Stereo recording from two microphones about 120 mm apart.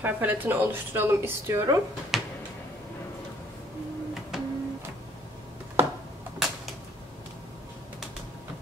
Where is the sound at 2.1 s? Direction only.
Centre (ahead or behind).